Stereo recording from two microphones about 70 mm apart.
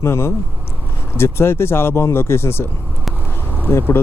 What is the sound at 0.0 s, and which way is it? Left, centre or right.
Speech, left.